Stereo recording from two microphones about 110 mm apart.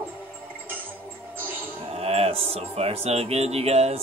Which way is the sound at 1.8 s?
65° right (ahead or behind).